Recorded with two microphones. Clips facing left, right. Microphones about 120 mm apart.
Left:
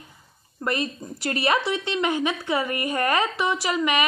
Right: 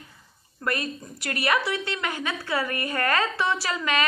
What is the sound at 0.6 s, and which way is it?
A woman's voice, 20° left (ahead or behind).